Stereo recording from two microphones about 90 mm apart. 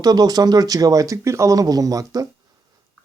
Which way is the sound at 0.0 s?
45° right (ahead or behind).